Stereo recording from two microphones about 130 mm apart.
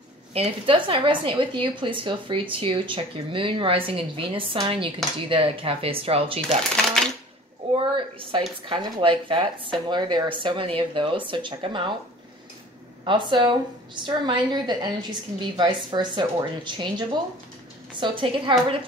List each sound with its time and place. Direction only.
0.3 s a woman's voice: 45° right (ahead or behind)
7.7 s a sound: 45° right (ahead or behind)
8.6 s a woman's voice: 40° right (ahead or behind)
13.0 s a woman's voice: 40° right (ahead or behind)